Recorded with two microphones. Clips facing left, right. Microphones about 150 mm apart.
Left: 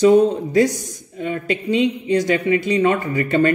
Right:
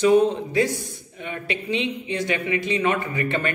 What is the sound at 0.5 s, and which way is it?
Speech, 40° left (ahead or behind).